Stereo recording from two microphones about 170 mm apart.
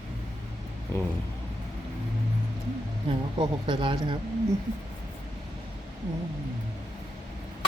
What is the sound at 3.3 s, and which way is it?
Speech, 30° right (ahead or behind).